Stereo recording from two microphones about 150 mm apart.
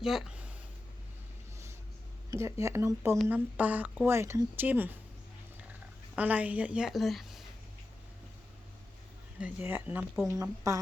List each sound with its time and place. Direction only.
0.0 s speech: centre (ahead or behind)
2.3 s a woman's voice: 20° right (ahead or behind)
6.1 s a woman's voice: 10° right (ahead or behind)
9.4 s a woman's voice: 15° right (ahead or behind)
10.2 s speech: 20° right (ahead or behind)